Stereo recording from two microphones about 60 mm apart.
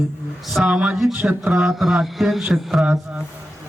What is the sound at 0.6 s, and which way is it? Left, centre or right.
A man's voice, centre.